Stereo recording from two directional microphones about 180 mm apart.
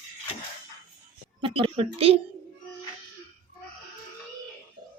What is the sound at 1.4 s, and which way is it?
Speech, 30° right (ahead or behind).